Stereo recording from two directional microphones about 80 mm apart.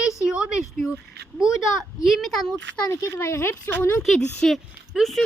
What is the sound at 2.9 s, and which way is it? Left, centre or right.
Speech, left.